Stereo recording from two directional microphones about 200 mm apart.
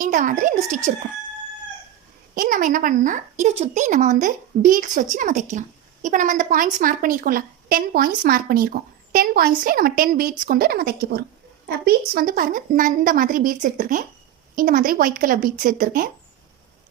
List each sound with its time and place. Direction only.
0.0 s a woman's voice: 40° right (ahead or behind)
2.3 s a woman's voice: 45° right (ahead or behind)